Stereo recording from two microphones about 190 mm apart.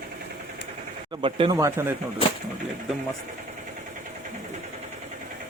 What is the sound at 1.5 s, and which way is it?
Speech, 15° right (ahead or behind).